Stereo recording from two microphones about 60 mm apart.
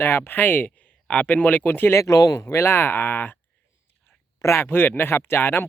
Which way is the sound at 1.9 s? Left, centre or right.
Left.